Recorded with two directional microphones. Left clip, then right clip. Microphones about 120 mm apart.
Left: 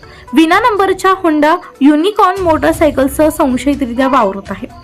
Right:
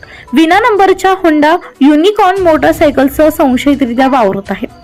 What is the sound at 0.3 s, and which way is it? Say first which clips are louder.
Speech: right 2 dB; 25° right (ahead or behind).